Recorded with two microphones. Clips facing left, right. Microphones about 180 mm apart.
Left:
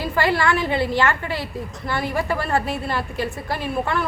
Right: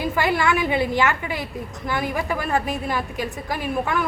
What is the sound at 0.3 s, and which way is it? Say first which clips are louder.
Speech: even; 15° right (ahead or behind).